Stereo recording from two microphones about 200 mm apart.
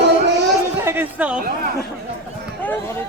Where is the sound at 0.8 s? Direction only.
10° right (ahead or behind).